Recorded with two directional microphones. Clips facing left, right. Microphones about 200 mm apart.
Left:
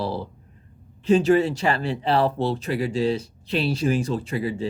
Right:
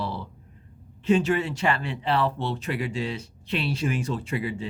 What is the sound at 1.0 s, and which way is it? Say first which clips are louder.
Speech: left 5 dB; 35° left (ahead or behind).